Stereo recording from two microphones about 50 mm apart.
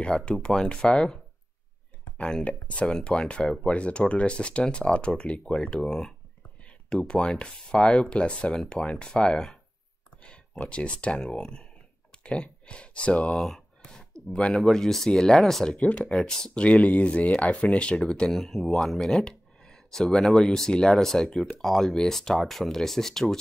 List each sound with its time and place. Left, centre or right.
0.0 s speech: centre
2.4 s speech: left
8.7 s speech: centre
9.0 s speech: centre
10.6 s speech: left
13.4 s speech: centre
18.2 s speech: centre